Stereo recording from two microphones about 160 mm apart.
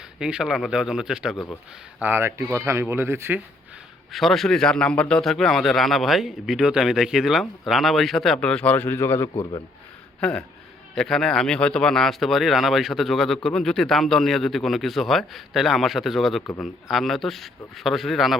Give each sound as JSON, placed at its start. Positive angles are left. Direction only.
{"t": 0.2, "sound": "a man's voice", "side_deg": -5}
{"t": 4.1, "sound": "a man's voice", "side_deg": 0}
{"t": 9.3, "sound": "speech", "side_deg": 30}
{"t": 10.2, "sound": "a man's voice", "side_deg": 5}